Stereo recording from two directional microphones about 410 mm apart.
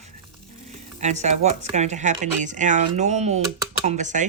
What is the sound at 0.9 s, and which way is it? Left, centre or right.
Speech, centre.